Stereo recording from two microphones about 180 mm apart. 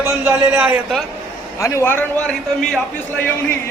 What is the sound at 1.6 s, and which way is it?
A man's voice, 15° left (ahead or behind).